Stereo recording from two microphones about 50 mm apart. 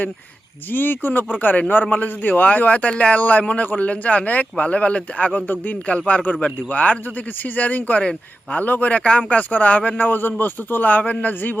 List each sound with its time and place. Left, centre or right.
0.7 s a man's voice: left
10.0 s a man's voice: left